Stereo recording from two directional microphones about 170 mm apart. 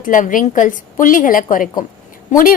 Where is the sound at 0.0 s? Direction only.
50° left (ahead or behind).